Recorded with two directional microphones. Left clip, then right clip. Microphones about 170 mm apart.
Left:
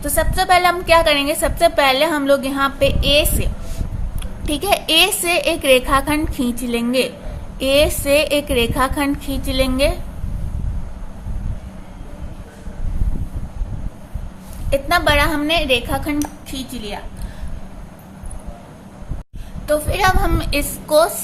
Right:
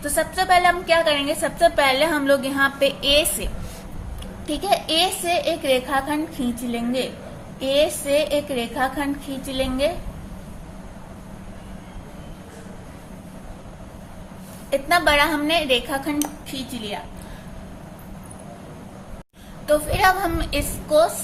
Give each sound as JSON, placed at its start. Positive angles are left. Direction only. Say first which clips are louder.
{"t": 0.0, "sound": "a woman's voice", "louder": "left 3 dB", "side_deg": 20}
{"t": 4.4, "sound": "a woman's voice", "louder": "left 4 dB", "side_deg": 35}
{"t": 14.7, "sound": "a woman's voice", "louder": "left 2 dB", "side_deg": 20}
{"t": 19.6, "sound": "a woman's voice", "louder": "left 1 dB", "side_deg": 20}